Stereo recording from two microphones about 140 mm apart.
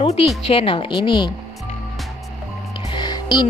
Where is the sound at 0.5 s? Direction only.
40° left (ahead or behind).